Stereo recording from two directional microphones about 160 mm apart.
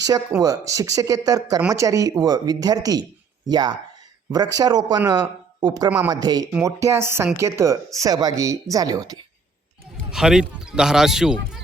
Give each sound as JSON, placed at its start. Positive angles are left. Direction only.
{"t": 0.0, "sound": "speech", "side_deg": -20}
{"t": 10.1, "sound": "speech", "side_deg": -5}